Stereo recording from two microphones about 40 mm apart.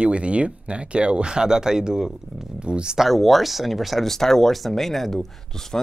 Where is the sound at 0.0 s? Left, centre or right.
Right.